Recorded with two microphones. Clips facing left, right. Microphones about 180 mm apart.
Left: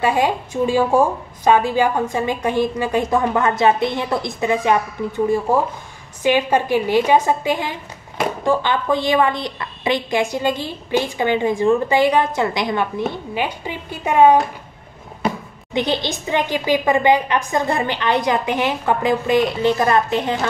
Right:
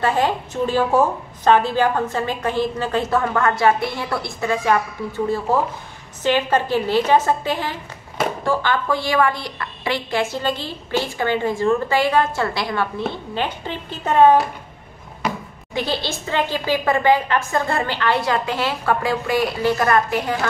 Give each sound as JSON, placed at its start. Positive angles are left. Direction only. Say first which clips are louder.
{"t": 0.0, "sound": "a woman's voice", "louder": "left 1 dB", "side_deg": 10}